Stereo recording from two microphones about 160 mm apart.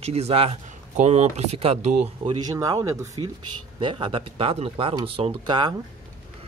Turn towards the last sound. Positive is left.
turn(degrees=-30)  # may be behind; listen again after turning